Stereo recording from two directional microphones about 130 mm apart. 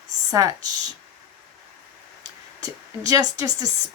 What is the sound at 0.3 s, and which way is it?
Speech, 25° right (ahead or behind).